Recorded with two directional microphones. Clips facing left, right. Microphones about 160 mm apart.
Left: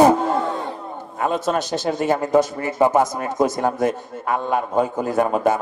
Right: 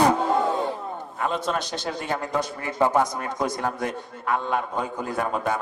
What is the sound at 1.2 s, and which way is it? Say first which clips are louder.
Speech: left 5 dB; 45° left (ahead or behind).